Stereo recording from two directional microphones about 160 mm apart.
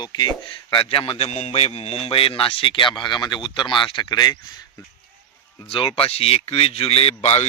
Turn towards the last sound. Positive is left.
turn(degrees=45)  # may be behind; listen again after turning